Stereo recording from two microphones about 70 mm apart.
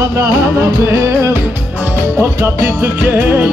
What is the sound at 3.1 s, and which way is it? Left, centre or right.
Music, right.